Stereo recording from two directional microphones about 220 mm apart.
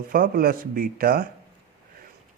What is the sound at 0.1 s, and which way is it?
Speech, 40° right (ahead or behind).